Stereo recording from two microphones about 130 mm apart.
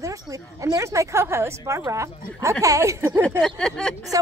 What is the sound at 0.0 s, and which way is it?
A woman's voice, 25° right (ahead or behind).